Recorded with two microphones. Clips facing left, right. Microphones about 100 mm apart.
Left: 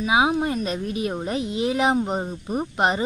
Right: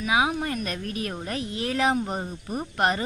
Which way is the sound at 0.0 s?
25° left (ahead or behind).